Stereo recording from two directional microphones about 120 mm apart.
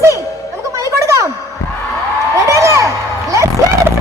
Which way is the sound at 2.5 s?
25° right (ahead or behind).